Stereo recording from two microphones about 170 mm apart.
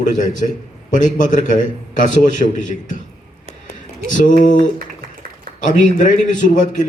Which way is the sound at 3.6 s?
50° left (ahead or behind).